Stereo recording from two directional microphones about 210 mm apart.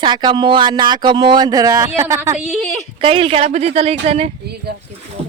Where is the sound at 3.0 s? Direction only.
25° right (ahead or behind).